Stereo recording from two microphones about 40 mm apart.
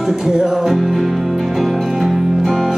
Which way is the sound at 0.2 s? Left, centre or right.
Centre.